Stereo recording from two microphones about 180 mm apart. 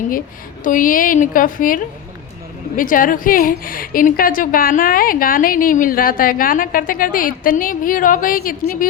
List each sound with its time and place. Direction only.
0.6 s a woman's voice: 50° left (ahead or behind)